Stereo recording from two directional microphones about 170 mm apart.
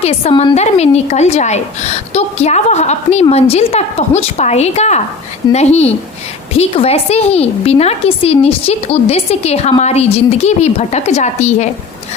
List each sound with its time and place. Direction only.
0.0 s a woman's voice: 35° left (ahead or behind)